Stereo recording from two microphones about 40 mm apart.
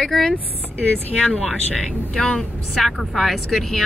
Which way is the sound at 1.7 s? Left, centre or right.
Centre.